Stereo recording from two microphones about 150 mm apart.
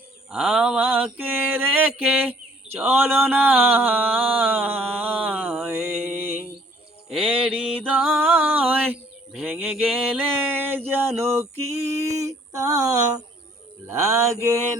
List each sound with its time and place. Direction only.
0.3 s mantra: 5° right (ahead or behind)
2.7 s a sound: 10° right (ahead or behind)
7.1 s mantra: 5° right (ahead or behind)
7.9 s music: 10° right (ahead or behind)
9.4 s mantra: 10° right (ahead or behind)
11.9 s a sound: 20° right (ahead or behind)